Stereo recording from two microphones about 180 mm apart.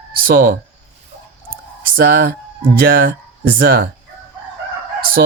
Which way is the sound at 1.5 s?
55° right (ahead or behind).